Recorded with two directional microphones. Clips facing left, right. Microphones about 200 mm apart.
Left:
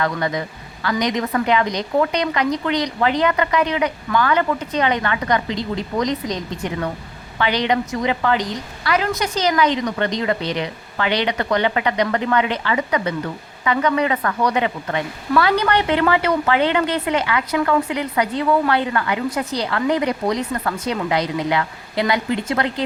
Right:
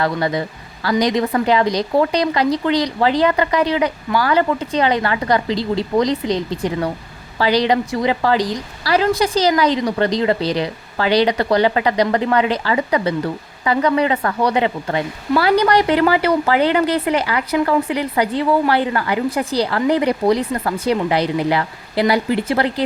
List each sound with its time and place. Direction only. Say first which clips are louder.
0.0 s a woman's voice: right 3 dB; 30° right (ahead or behind)